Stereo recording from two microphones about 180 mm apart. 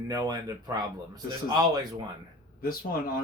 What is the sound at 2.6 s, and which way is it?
Speech, 55° left (ahead or behind).